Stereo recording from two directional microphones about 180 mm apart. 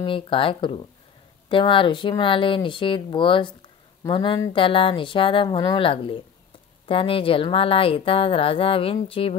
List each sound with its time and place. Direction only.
0.0 s speech: 30° left (ahead or behind)